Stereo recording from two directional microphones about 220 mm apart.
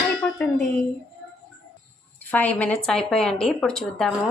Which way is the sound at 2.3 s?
5° left (ahead or behind).